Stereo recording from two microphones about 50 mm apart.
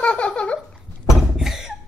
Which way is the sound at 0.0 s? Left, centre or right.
Left.